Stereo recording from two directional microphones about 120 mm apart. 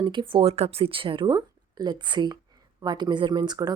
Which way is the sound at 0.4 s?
60° right (ahead or behind).